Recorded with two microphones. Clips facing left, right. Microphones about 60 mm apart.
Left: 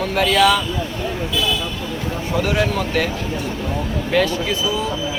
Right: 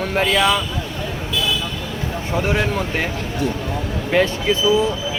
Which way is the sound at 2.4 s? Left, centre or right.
Right.